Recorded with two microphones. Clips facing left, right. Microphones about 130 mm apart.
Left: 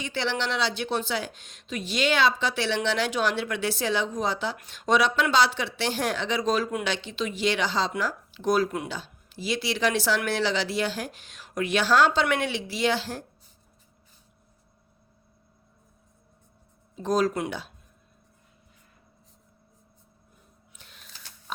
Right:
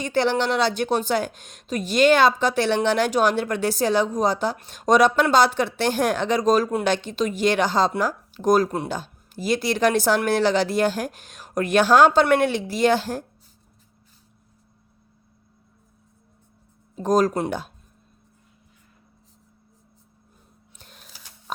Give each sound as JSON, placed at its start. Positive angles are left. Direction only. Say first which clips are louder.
{"t": 0.0, "sound": "speech", "louder": "right 8 dB", "side_deg": -45}
{"t": 16.9, "sound": "speech", "louder": "right 5 dB", "side_deg": -45}
{"t": 20.7, "sound": "typewriter", "louder": "right 4 dB", "side_deg": -45}